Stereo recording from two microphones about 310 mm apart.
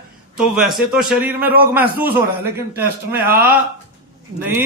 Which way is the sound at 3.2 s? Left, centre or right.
Right.